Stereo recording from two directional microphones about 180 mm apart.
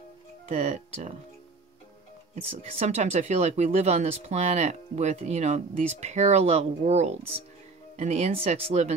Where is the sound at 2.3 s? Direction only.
35° right (ahead or behind).